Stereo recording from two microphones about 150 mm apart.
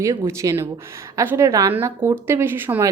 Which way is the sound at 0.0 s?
20° right (ahead or behind).